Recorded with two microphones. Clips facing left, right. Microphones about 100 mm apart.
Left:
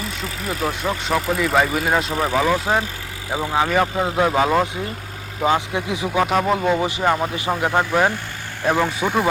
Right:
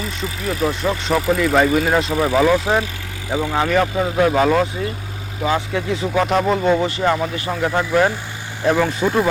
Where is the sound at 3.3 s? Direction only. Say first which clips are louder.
Right 2 dB; 20° left (ahead or behind).